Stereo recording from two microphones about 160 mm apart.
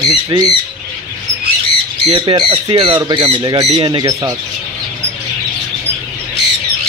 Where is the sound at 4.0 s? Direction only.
20° right (ahead or behind).